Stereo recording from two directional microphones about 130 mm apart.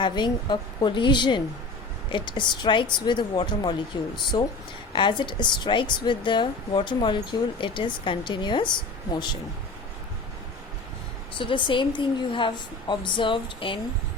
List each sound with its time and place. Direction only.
0.0 s a woman's voice: 35° left (ahead or behind)
11.3 s a woman's voice: 40° left (ahead or behind)